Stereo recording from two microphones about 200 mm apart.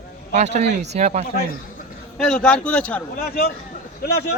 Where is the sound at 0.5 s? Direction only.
35° right (ahead or behind).